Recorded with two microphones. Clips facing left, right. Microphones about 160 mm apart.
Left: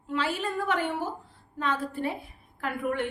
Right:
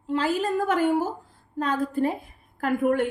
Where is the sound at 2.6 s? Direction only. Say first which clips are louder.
Right 7 dB; 45° right (ahead or behind).